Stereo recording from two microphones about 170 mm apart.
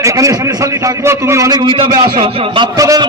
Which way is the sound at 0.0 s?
20° right (ahead or behind).